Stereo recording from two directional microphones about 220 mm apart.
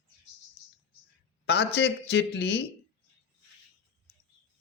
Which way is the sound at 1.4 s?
50° left (ahead or behind).